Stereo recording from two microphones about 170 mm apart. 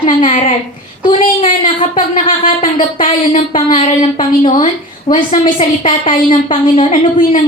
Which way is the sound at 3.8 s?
35° left (ahead or behind).